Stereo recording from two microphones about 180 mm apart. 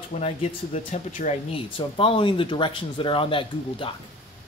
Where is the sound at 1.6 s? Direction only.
30° left (ahead or behind).